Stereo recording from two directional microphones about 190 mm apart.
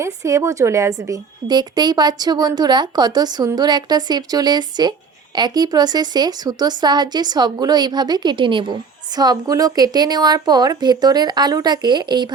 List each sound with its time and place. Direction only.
0.0 s a woman's voice: 15° right (ahead or behind)